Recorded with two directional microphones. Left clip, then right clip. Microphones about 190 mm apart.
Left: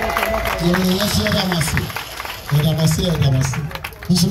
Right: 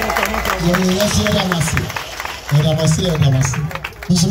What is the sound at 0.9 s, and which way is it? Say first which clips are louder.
Speech: right 3 dB; 50° left (ahead or behind).